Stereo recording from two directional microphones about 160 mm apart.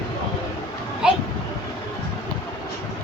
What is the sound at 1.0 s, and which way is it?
Child singing, 5° right (ahead or behind).